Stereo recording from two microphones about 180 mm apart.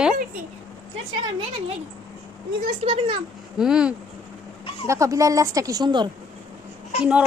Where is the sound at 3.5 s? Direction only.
5° right (ahead or behind).